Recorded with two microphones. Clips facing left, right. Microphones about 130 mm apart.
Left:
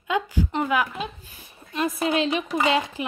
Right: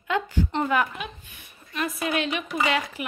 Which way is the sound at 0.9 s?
35° left (ahead or behind).